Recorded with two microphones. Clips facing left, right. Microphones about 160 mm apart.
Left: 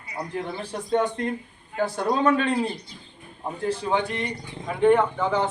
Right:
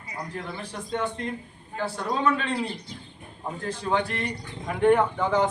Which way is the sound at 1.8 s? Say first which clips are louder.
Left 4 dB; 40° left (ahead or behind).